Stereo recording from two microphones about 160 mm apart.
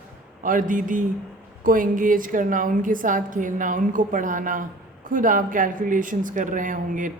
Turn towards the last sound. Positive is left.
turn(degrees=-55)  # may be behind; listen again after turning